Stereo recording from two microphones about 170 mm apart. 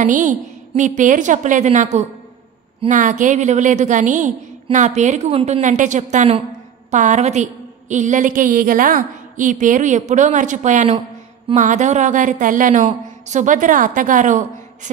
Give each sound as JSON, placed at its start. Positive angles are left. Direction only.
{"t": 0.0, "sound": "a woman's voice", "side_deg": -45}